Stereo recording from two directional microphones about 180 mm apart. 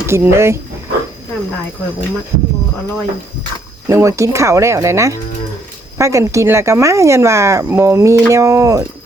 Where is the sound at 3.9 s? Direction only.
15° right (ahead or behind).